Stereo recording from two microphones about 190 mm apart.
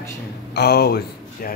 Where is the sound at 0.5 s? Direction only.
60° left (ahead or behind).